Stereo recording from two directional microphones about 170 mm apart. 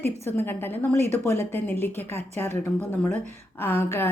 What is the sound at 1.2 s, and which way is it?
Speech, 15° left (ahead or behind).